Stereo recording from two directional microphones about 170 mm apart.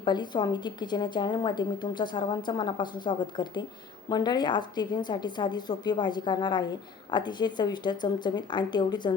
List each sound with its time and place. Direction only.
0.0 s a woman's voice: 25° left (ahead or behind)